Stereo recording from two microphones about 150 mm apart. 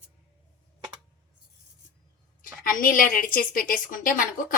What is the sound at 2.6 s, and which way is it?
A woman's voice, 70° left (ahead or behind).